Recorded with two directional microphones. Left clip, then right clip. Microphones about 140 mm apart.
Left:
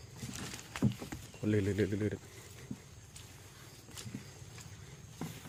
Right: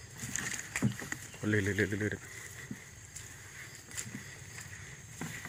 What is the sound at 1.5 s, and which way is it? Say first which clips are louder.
Speech: right 2 dB; 30° left (ahead or behind).